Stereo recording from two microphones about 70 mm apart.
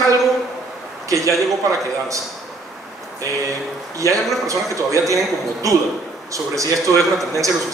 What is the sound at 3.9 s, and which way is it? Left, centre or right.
A man's voice, right.